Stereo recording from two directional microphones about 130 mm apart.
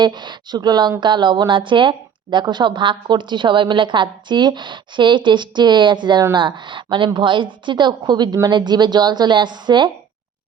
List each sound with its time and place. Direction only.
0.0 s speech: 35° right (ahead or behind)